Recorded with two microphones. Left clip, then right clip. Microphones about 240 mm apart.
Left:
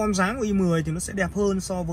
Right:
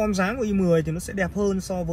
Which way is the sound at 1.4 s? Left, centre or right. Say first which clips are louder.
Left 1 dB; left.